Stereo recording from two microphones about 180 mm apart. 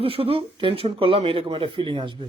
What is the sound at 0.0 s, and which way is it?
Speech, 30° right (ahead or behind).